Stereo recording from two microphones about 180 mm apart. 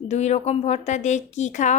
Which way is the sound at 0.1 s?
40° left (ahead or behind).